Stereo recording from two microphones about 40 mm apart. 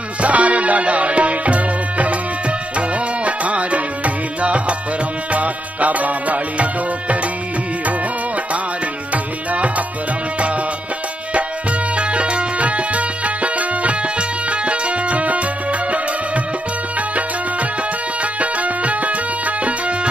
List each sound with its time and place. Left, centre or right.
0.2 s music: right
9.1 s tabla: right
11.9 s music: right
18.2 s music: right